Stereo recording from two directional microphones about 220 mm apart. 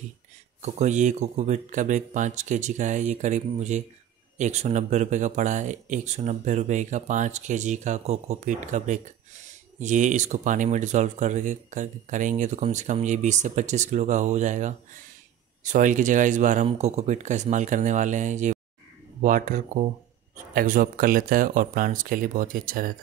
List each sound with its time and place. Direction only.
0.6 s speech: 30° right (ahead or behind)